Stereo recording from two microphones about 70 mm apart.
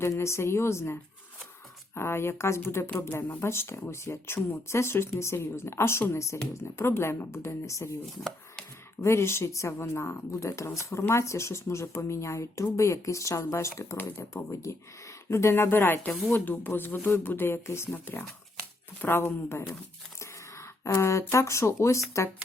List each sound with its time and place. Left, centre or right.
0.0 s speech: left
2.0 s speech: left
9.0 s speech: left
20.6 s a sound: left
21.3 s speech: left